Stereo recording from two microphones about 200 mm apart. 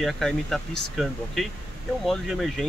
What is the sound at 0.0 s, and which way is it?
Speech, centre (ahead or behind).